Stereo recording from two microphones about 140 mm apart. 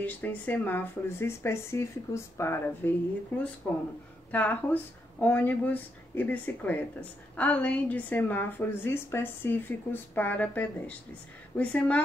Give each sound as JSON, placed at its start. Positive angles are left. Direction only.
{"t": 0.0, "sound": "speech", "side_deg": 10}